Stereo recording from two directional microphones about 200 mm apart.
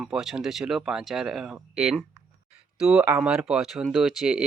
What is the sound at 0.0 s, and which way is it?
Speech, centre (ahead or behind).